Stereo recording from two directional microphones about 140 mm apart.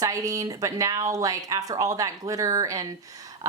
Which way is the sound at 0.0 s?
25° right (ahead or behind).